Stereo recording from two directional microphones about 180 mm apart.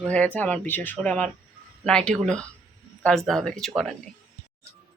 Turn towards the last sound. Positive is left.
turn(degrees=5)  # may be behind; listen again after turning